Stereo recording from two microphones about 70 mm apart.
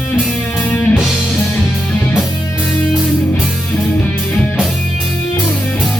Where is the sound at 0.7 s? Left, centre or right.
Left.